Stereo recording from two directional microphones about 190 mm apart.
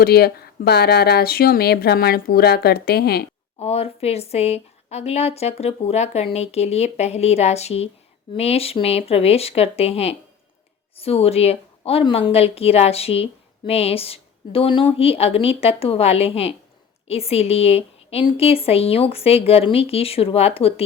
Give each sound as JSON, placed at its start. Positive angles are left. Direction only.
{"t": 0.0, "sound": "speech", "side_deg": 55}
{"t": 3.6, "sound": "speech", "side_deg": 30}